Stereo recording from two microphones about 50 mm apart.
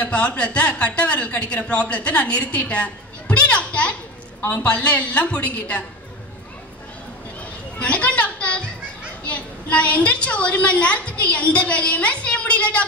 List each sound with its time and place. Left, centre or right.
0.0 s a woman's voice: left
7.8 s a sound: left
9.2 s a woman's voice: left